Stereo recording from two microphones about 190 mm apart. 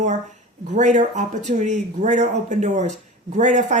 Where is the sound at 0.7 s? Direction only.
40° right (ahead or behind).